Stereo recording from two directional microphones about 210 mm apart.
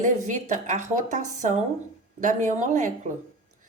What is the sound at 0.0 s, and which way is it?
A woman's voice, 35° right (ahead or behind).